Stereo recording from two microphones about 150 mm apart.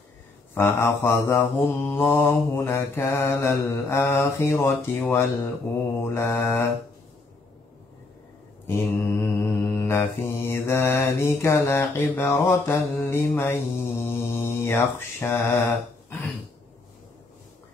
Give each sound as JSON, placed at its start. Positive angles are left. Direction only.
{"t": 0.6, "sound": "mantra", "side_deg": 15}
{"t": 8.6, "sound": "mantra", "side_deg": 15}